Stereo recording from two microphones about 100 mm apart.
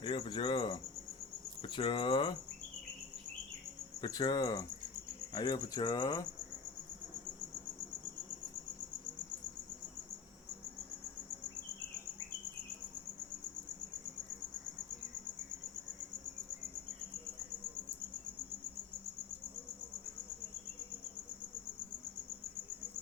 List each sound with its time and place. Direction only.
0.0 s speech: 60° left (ahead or behind)
4.0 s speech: 45° left (ahead or behind)